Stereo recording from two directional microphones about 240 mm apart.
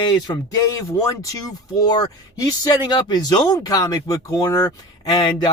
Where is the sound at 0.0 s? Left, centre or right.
Centre.